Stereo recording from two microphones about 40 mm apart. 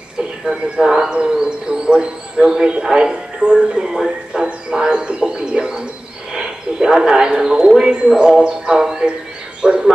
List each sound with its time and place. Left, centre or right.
0.2 s speech: centre
6.3 s a sound: centre
9.6 s speech: centre